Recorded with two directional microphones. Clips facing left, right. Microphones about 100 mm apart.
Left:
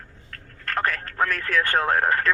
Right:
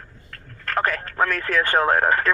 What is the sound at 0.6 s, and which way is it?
Speech, 40° right (ahead or behind).